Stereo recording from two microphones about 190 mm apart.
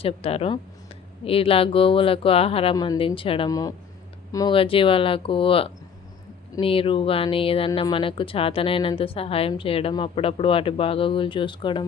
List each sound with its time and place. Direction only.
0.0 s a woman's voice: 30° left (ahead or behind)